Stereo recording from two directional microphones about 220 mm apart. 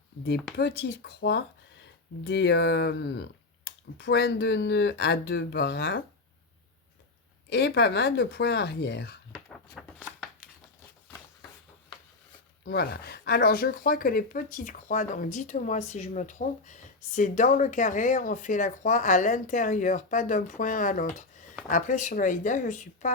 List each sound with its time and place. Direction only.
0.5 s speech: 45° left (ahead or behind)
7.5 s speech: 50° left (ahead or behind)
9.5 s a sound: centre (ahead or behind)
12.6 s speech: 45° left (ahead or behind)